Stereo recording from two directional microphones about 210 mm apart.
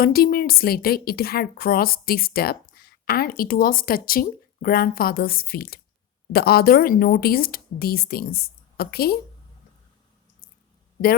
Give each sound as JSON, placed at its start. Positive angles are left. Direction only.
{"t": 0.0, "sound": "a woman's voice", "side_deg": 45}